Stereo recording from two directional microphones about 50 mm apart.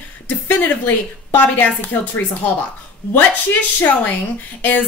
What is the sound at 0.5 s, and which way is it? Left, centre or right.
A woman's voice, left.